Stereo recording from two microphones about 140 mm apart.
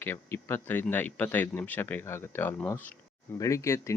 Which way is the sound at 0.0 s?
15° left (ahead or behind).